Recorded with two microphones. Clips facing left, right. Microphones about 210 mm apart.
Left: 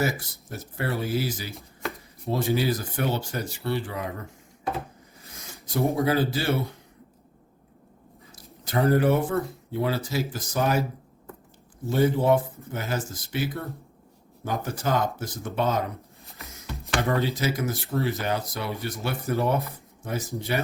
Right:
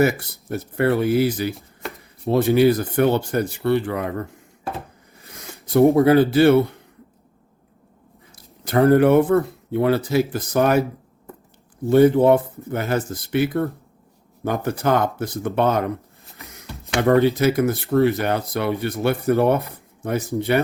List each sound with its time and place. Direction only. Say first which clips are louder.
0.0 s speech: right 8 dB; 60° right (ahead or behind)
5.6 s speech: right 10 dB; 60° right (ahead or behind)
8.6 s speech: right 7 dB; 60° right (ahead or behind)
11.9 s speech: right 8 dB; 60° right (ahead or behind)